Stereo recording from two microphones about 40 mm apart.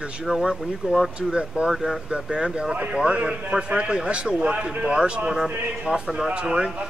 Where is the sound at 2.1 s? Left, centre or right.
Centre.